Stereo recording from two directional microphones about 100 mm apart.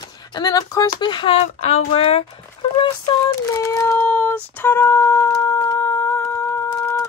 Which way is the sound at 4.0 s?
20° left (ahead or behind).